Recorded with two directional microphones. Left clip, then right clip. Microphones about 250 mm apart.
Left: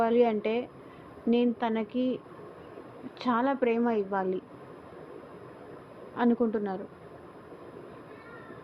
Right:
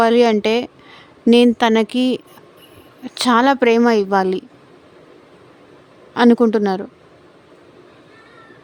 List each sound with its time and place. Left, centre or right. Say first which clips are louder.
0.0 s a woman's voice: right 11 dB; right
6.1 s a woman's voice: right 14 dB; right